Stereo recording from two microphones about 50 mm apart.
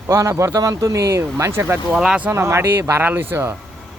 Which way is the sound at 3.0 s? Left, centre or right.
Right.